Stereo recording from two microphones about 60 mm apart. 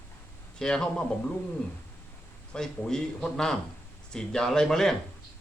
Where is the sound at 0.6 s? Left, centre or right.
Centre.